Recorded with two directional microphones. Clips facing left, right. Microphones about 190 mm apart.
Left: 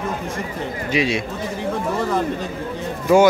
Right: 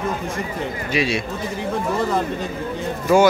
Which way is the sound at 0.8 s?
20° left (ahead or behind).